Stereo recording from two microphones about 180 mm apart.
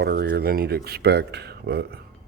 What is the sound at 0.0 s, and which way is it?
Speech, 60° right (ahead or behind).